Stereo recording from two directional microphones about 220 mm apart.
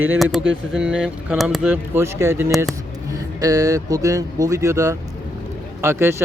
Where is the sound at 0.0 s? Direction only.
5° right (ahead or behind).